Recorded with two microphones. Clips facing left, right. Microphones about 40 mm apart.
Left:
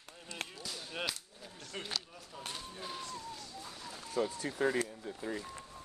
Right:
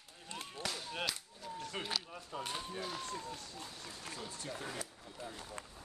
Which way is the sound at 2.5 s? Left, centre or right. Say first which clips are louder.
Right 1 dB; centre.